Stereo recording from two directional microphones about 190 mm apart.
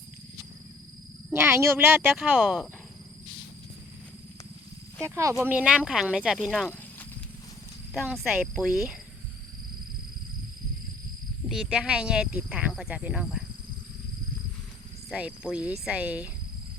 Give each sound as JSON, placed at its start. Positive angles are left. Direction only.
{"t": 1.3, "sound": "speech", "side_deg": -10}
{"t": 5.0, "sound": "speech", "side_deg": -15}
{"t": 7.9, "sound": "speech", "side_deg": 0}
{"t": 11.4, "sound": "speech", "side_deg": -5}
{"t": 15.1, "sound": "speech", "side_deg": -5}